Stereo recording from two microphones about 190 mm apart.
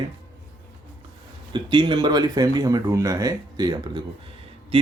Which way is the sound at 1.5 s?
25° right (ahead or behind).